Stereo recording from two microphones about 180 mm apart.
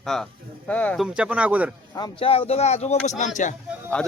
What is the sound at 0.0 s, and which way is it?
Speech, centre (ahead or behind).